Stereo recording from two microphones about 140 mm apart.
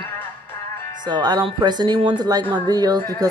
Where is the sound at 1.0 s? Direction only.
30° right (ahead or behind).